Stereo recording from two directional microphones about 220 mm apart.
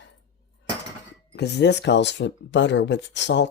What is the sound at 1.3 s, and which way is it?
Speech, 50° left (ahead or behind).